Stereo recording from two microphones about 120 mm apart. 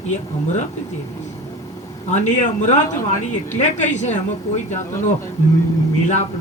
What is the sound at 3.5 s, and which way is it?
Speech, 80° left.